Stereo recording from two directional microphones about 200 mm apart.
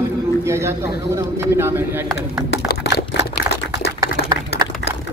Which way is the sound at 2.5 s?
55° left (ahead or behind).